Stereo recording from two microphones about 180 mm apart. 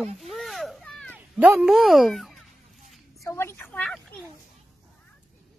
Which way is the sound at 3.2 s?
15° left (ahead or behind).